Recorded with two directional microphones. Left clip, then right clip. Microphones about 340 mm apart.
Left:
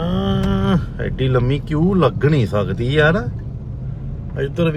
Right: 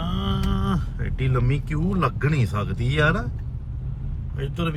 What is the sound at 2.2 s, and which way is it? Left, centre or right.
Speech, centre.